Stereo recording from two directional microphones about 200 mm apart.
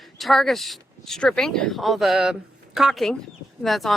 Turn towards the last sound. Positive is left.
turn(degrees=0)  # may be behind; listen again after turning